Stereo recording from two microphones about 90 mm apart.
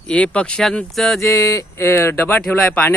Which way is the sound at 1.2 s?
35° left (ahead or behind).